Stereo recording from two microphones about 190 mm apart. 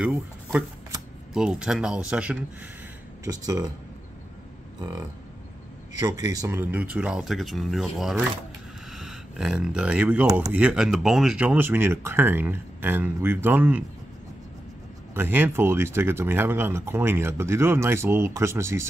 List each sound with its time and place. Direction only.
0.0 s speech: 5° right (ahead or behind)
3.4 s speech: 20° right (ahead or behind)
5.9 s speech: 20° right (ahead or behind)
15.1 s speech: 10° right (ahead or behind)